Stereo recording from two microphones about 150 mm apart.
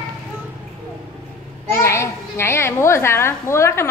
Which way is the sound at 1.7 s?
20° left (ahead or behind).